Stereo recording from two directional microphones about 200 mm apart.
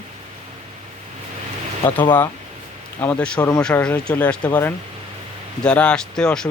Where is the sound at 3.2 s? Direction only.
5° left (ahead or behind).